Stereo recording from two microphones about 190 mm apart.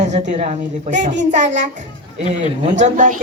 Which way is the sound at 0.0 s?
40° right (ahead or behind).